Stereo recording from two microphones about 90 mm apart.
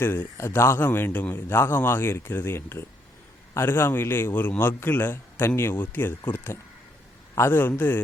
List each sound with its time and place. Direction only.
0.0 s a man's voice: 25° left (ahead or behind)